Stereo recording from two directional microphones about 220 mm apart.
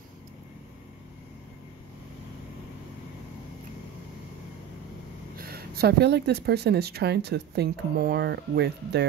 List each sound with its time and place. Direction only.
5.3 s speech: 45° right (ahead or behind)